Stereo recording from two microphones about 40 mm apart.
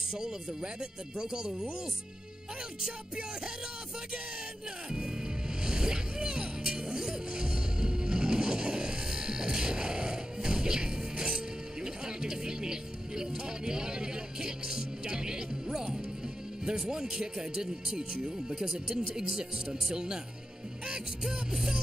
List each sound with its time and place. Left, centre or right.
0.2 s speech: centre
5.6 s music: centre
16.6 s speech: right